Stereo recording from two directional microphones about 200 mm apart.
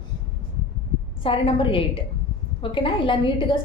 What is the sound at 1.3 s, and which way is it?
A woman's voice, 25° left (ahead or behind).